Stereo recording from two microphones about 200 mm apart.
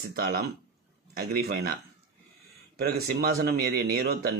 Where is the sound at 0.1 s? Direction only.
50° right (ahead or behind).